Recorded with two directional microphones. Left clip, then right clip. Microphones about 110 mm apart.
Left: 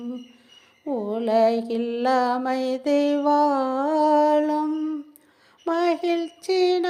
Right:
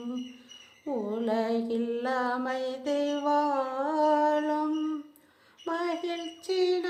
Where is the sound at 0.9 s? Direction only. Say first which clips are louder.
Left 7 dB; 40° left (ahead or behind).